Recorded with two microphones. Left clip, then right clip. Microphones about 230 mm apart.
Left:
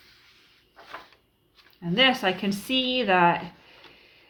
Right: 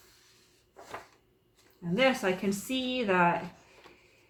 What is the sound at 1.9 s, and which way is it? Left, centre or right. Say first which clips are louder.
Speech: left 5 dB; left.